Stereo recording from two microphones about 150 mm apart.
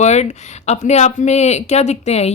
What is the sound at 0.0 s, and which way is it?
A woman's voice, 50° left (ahead or behind).